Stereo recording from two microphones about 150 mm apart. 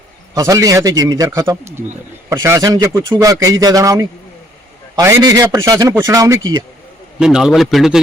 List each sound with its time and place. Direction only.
0.3 s speech: 25° right (ahead or behind)
7.2 s a man's voice: 5° right (ahead or behind)